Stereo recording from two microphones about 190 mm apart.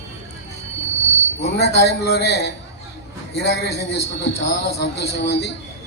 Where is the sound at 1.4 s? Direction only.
60° left (ahead or behind).